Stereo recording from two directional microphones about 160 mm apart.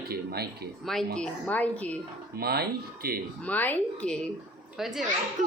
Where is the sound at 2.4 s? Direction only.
75° right (ahead or behind).